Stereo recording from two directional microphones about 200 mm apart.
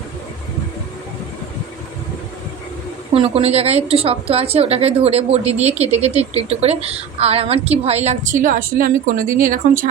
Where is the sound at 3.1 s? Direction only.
30° right (ahead or behind).